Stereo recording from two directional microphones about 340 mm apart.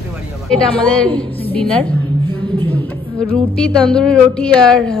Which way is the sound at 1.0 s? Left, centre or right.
Centre.